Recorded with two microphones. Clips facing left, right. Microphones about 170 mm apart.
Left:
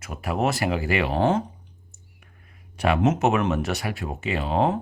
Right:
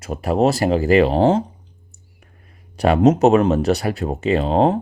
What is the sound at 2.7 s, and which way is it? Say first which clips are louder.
Speech: right 7 dB; 35° right (ahead or behind).